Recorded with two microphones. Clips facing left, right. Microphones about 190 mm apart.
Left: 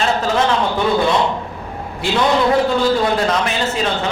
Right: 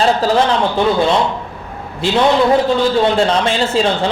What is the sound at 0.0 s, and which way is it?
Speech, 35° right (ahead or behind).